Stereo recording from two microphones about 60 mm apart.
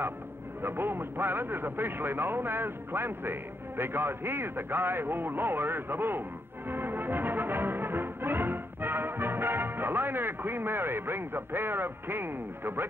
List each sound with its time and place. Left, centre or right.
0.6 s speech: right
6.7 s music: right